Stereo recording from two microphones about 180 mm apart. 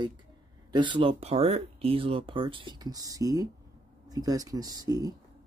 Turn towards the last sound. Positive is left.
turn(degrees=-20)  # may be behind; listen again after turning